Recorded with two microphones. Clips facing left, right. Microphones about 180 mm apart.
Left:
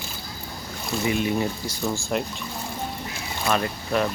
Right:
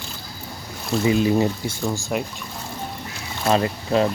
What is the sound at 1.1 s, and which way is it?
Speech, 30° right (ahead or behind).